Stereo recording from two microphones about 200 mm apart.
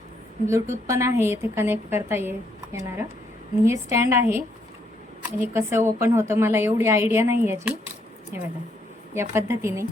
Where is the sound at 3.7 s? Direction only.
15° right (ahead or behind).